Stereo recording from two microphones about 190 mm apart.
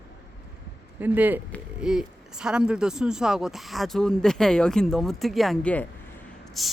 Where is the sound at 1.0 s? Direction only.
10° right (ahead or behind).